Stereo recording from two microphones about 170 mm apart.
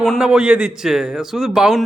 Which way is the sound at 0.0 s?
5° right (ahead or behind).